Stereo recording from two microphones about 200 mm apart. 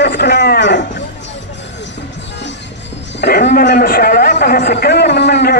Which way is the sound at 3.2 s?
55° left (ahead or behind).